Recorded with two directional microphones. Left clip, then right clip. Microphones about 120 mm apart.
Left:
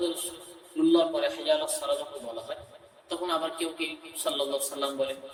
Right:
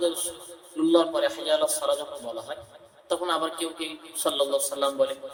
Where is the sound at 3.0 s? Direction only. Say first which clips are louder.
Right 4 dB; 10° right (ahead or behind).